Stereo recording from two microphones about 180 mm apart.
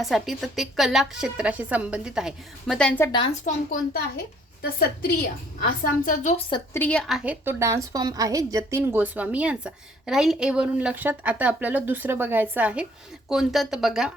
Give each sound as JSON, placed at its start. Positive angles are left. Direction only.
{"t": 0.0, "sound": "a woman's voice", "side_deg": 0}
{"t": 3.0, "sound": "a woman's voice", "side_deg": 25}
{"t": 3.4, "sound": "a woman's voice", "side_deg": 55}
{"t": 6.7, "sound": "a woman's voice", "side_deg": 5}